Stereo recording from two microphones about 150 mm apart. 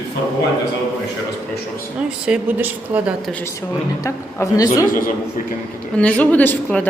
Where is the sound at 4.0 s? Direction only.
20° left (ahead or behind).